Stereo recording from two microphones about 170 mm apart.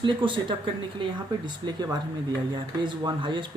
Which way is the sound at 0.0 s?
30° right (ahead or behind).